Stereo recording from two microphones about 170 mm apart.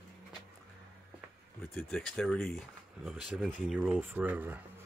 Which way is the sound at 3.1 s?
5° right (ahead or behind).